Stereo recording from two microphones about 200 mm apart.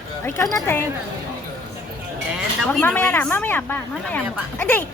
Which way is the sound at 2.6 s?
5° left (ahead or behind).